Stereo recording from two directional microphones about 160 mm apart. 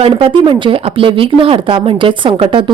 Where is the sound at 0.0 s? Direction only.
35° right (ahead or behind).